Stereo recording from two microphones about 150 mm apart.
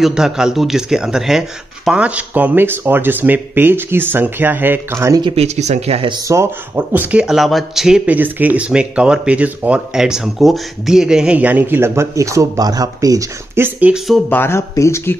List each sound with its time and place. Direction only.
0.0 s speech: 5° right (ahead or behind)
5.2 s speech: 40° right (ahead or behind)
6.2 s speech: 20° right (ahead or behind)
13.7 s speech: 5° right (ahead or behind)
14.3 s speech: 15° left (ahead or behind)